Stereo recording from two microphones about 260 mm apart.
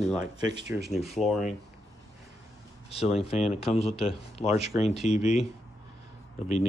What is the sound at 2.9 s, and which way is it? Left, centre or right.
Speech, left.